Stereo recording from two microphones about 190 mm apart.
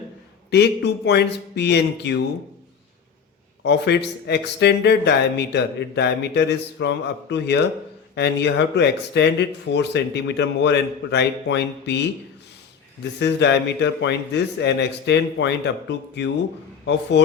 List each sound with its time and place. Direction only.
0.5 s a man's voice: 65° left (ahead or behind)
3.6 s a man's voice: 60° left (ahead or behind)
13.0 s a man's voice: 65° left (ahead or behind)